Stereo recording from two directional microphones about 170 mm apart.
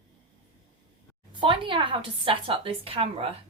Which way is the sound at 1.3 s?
30° right (ahead or behind).